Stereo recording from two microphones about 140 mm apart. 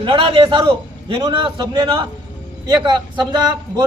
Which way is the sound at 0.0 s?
40° right (ahead or behind).